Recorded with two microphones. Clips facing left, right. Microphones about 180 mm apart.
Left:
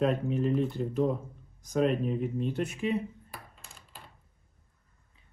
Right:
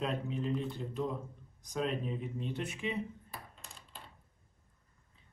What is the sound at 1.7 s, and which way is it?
Speech, 50° left (ahead or behind).